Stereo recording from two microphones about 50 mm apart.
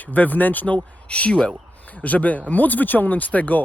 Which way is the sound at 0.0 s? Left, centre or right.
Left.